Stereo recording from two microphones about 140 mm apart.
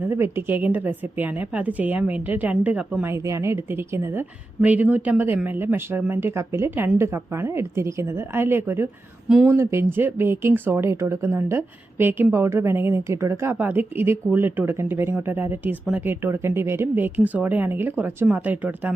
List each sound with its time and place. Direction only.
0.1 s speech: 15° right (ahead or behind)